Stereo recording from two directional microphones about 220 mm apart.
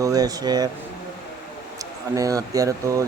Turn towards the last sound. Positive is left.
turn(degrees=-15)  # may be behind; listen again after turning